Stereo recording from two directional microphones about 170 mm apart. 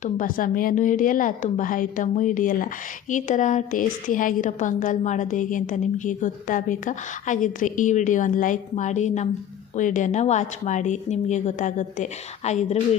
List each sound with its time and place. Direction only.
0.0 s a woman's voice: 55° left (ahead or behind)